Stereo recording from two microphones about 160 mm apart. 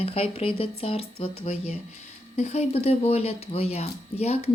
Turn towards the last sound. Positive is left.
turn(degrees=40)  # may be behind; listen again after turning